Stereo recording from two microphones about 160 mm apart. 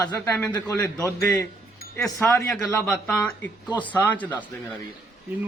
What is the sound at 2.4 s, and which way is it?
A man's voice, centre (ahead or behind).